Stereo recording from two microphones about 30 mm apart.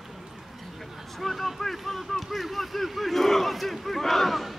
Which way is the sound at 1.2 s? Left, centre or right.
Centre.